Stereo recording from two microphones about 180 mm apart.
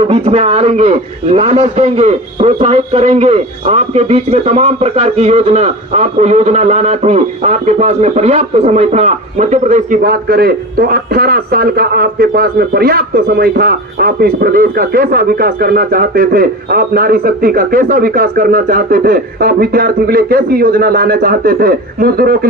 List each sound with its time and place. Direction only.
0.0 s a man's voice: 35° right (ahead or behind)
10.0 s a man's voice: 60° right (ahead or behind)